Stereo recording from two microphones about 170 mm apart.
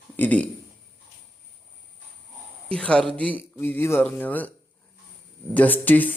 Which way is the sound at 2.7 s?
5° left (ahead or behind).